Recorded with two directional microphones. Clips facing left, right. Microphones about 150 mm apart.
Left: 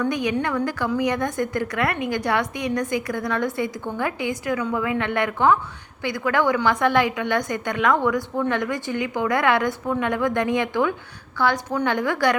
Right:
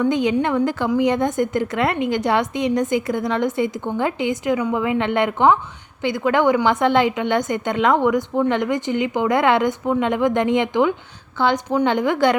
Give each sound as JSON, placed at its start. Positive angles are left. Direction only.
{"t": 0.0, "sound": "a woman's voice", "side_deg": -25}